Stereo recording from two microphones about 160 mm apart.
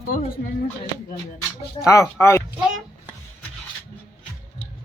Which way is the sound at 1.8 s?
20° left (ahead or behind).